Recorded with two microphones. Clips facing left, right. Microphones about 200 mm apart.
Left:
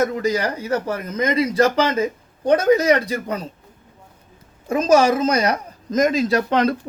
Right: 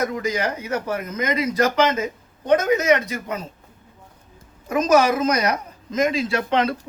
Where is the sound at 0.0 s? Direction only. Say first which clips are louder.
Left 3 dB; 35° left (ahead or behind).